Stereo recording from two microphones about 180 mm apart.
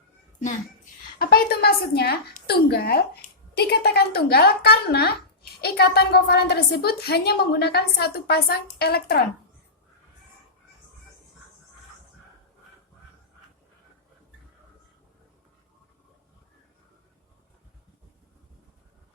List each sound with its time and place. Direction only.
1.2 s a woman's voice: 55° left (ahead or behind)